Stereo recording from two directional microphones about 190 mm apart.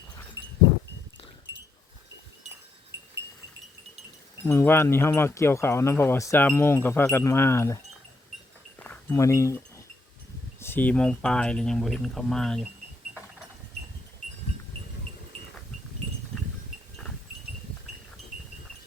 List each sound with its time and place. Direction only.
0.4 s a sound: 60° right (ahead or behind)
1.5 s livestock: 65° right (ahead or behind)
2.9 s goat: 65° right (ahead or behind)
4.4 s speech: 15° left (ahead or behind)
8.8 s a sound: 10° left (ahead or behind)
10.6 s speech: 10° left (ahead or behind)